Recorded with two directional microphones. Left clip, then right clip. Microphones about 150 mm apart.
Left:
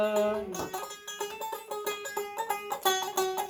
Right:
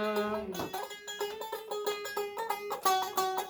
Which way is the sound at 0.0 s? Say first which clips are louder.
Left 5 dB; 5° left (ahead or behind).